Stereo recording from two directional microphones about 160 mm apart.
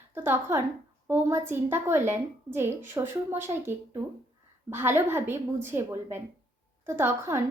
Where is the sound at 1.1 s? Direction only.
15° right (ahead or behind).